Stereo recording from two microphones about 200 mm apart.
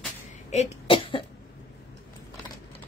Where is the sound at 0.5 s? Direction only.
30° left (ahead or behind).